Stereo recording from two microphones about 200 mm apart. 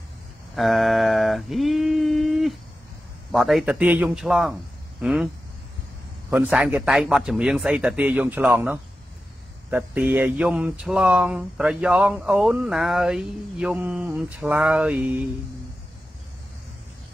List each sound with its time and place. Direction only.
0.6 s a sound: centre (ahead or behind)
3.3 s speech: centre (ahead or behind)
6.3 s speech: 5° right (ahead or behind)